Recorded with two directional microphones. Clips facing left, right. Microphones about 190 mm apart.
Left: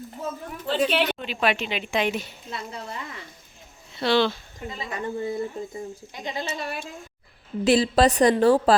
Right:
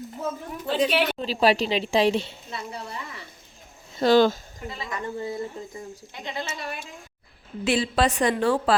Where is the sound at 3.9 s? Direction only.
45° right (ahead or behind).